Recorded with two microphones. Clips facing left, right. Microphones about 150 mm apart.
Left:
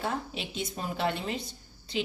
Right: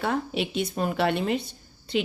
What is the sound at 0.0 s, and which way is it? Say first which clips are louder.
A woman's voice: right 7 dB; 65° right (ahead or behind).